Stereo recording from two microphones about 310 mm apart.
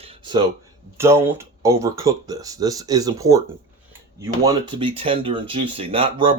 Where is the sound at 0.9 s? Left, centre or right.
Centre.